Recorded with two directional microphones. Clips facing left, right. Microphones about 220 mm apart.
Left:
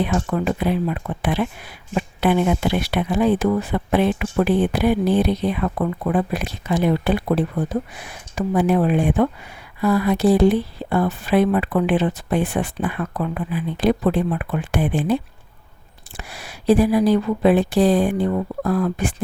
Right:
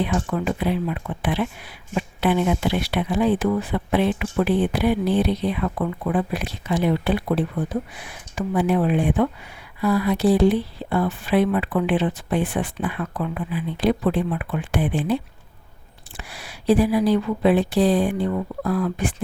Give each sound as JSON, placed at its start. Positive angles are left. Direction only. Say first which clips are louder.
{"t": 0.0, "sound": "speech", "louder": "left 2 dB", "side_deg": 45}